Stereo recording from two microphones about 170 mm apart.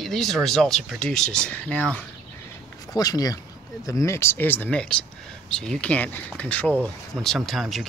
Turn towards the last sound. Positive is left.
turn(degrees=0)  # may be behind; listen again after turning